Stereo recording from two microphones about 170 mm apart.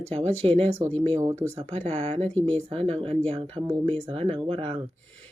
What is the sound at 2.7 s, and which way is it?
Speech, 35° right (ahead or behind).